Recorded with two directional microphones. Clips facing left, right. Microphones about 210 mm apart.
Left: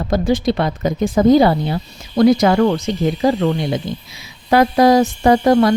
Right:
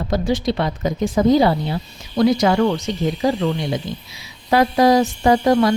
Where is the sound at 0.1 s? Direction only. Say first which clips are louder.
Left 4 dB; 50° left (ahead or behind).